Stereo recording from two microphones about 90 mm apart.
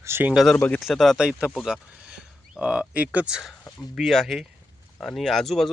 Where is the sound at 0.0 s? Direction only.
25° right (ahead or behind).